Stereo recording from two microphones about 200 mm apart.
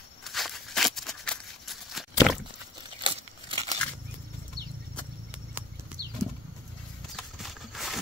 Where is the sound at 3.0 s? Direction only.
25° right (ahead or behind).